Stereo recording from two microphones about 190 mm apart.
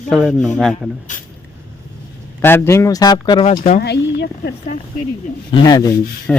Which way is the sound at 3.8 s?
60° left (ahead or behind).